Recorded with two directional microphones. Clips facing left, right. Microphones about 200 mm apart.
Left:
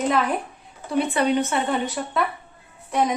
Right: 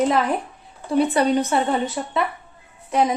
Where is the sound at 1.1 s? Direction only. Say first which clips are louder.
Right 2 dB; 35° right (ahead or behind).